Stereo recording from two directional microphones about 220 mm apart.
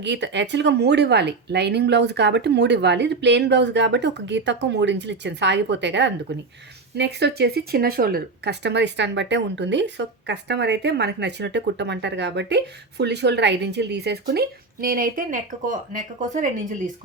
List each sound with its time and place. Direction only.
0.0 s speech: 50° right (ahead or behind); by 16.9 s 35° right (ahead or behind)